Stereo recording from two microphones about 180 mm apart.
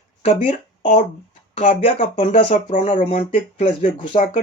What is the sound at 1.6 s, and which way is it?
Speech, 35° left (ahead or behind).